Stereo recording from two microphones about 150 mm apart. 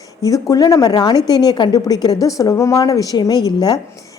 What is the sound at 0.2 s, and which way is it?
A woman's voice, 25° left (ahead or behind).